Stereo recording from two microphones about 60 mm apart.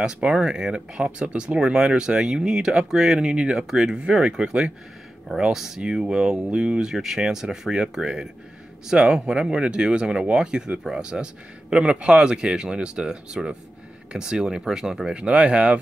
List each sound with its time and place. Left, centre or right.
0.0 s speech: centre